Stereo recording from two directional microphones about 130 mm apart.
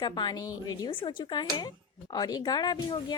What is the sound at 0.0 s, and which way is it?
Speech, 35° left (ahead or behind).